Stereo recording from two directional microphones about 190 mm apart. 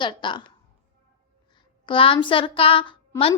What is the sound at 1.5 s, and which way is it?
A woman's voice, 25° left (ahead or behind).